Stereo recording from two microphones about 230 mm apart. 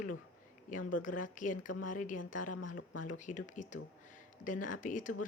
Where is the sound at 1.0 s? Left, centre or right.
Left.